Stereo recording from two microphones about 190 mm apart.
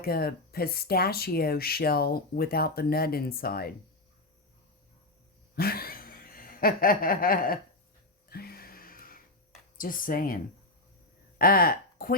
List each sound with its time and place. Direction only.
0.0 s speech: 50° left (ahead or behind)
5.5 s chuckle: 55° left (ahead or behind)
8.3 s music: 55° left (ahead or behind)
9.7 s speech: 45° left (ahead or behind)